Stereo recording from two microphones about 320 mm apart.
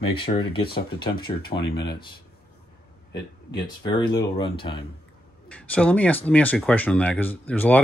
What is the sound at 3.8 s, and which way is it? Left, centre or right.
Speech, centre.